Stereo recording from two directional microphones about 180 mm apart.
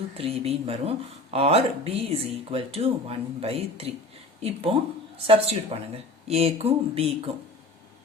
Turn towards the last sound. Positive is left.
turn(degrees=-30)  # may be behind; listen again after turning